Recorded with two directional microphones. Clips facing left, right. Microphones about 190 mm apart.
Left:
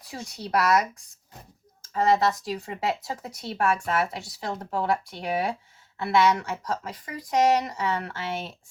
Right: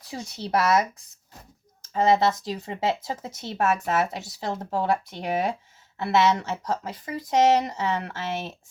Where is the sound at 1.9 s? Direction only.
25° right (ahead or behind).